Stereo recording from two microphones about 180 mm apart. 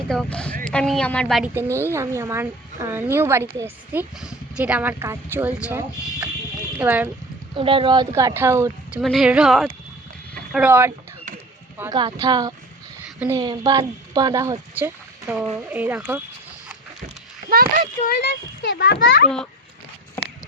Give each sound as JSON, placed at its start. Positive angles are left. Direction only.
{"t": 0.1, "sound": "speech", "side_deg": 5}
{"t": 1.5, "sound": "a woman's voice", "side_deg": -15}
{"t": 7.5, "sound": "a woman's voice", "side_deg": -30}
{"t": 9.0, "sound": "a woman's voice", "side_deg": 0}
{"t": 13.1, "sound": "a woman's voice", "side_deg": -10}
{"t": 13.4, "sound": "a woman's voice", "side_deg": -25}
{"t": 18.1, "sound": "a child's voice", "side_deg": 75}
{"t": 18.8, "sound": "a child's voice", "side_deg": 55}
{"t": 19.0, "sound": "a child's voice", "side_deg": 75}